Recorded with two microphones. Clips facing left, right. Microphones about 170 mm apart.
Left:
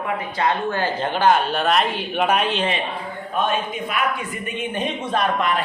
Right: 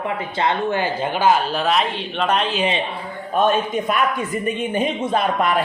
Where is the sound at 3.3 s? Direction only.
45° right (ahead or behind).